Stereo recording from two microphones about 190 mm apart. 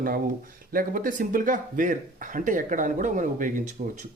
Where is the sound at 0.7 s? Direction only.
45° right (ahead or behind).